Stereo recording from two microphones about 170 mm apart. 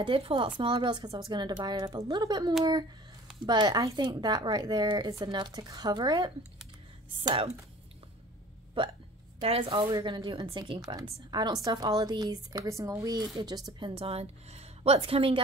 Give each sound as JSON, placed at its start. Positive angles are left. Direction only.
{"t": 0.0, "sound": "a woman's voice", "side_deg": -30}
{"t": 9.4, "sound": "a woman's voice", "side_deg": -35}